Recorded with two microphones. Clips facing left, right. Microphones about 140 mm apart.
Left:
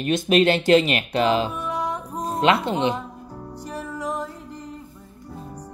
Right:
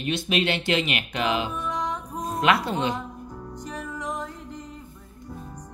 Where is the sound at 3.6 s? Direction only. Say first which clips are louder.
Left 3 dB; 10° left (ahead or behind).